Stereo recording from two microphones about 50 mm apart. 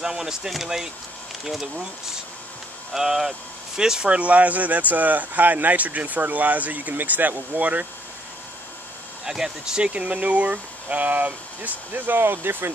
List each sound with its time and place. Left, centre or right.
0.0 s speech: centre
2.9 s speech: centre
4.1 s speech: right
9.2 s speech: centre
9.9 s speech: right